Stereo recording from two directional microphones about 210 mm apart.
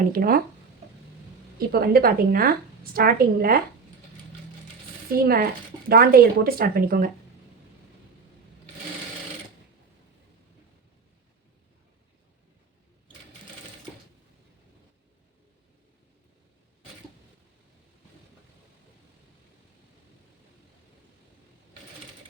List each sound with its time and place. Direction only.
0.1 s speech: 45° right (ahead or behind)
1.5 s speech: 45° right (ahead or behind)
5.1 s speech: 45° right (ahead or behind)